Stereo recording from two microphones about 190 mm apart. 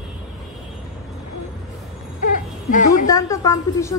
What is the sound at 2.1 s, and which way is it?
Baby cry, 45° left (ahead or behind).